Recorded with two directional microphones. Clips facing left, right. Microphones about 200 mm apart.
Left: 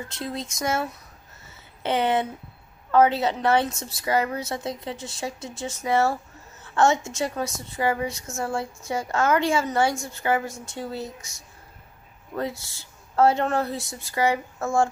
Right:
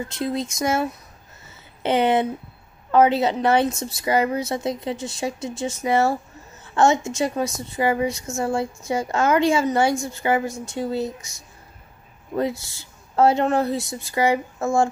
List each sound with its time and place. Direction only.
0.2 s a woman's voice: 15° right (ahead or behind)
13.1 s a woman's voice: 15° right (ahead or behind)